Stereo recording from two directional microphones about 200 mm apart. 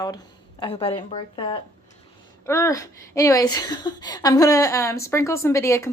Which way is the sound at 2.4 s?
15° left (ahead or behind).